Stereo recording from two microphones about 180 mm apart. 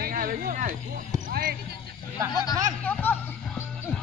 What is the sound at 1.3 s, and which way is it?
Basketball bounce, 50° right (ahead or behind).